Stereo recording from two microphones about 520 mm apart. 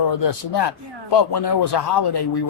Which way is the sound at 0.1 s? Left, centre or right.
Left.